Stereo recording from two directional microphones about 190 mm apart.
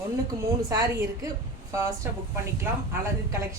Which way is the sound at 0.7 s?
20° right (ahead or behind).